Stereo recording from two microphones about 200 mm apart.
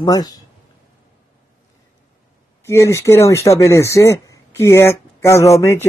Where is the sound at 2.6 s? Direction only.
15° left (ahead or behind).